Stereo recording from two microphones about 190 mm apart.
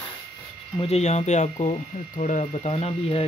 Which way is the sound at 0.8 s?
35° left (ahead or behind).